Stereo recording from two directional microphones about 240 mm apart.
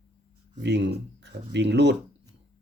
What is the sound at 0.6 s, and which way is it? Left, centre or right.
Speech, right.